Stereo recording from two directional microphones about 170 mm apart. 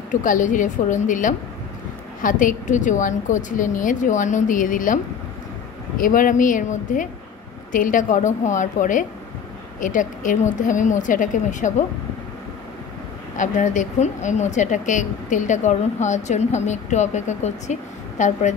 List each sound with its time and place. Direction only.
0.1 s a woman's voice: 50° left (ahead or behind)
13.4 s a woman's voice: 45° left (ahead or behind)